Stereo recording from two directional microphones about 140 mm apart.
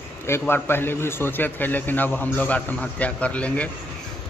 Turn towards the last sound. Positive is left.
turn(degrees=10)  # may be behind; listen again after turning